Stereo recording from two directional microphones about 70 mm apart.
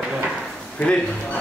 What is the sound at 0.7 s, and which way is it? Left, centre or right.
Speech, centre.